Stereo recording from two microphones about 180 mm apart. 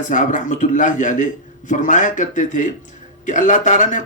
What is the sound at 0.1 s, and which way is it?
A man's voice, 45° left (ahead or behind).